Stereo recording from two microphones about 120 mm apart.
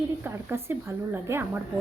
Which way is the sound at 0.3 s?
20° right (ahead or behind).